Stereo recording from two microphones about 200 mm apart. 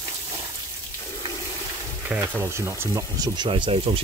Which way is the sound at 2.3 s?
15° right (ahead or behind).